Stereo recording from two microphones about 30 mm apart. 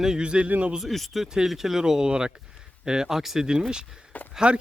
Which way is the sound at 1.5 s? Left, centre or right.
Centre.